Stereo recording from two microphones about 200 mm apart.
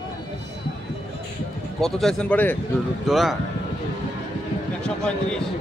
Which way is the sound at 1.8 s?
Centre (ahead or behind).